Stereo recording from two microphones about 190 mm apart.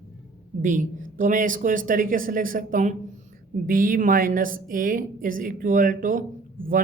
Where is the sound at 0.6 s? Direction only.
45° right (ahead or behind).